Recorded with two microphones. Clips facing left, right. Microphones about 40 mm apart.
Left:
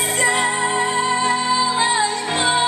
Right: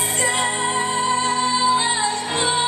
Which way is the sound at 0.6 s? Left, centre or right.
Centre.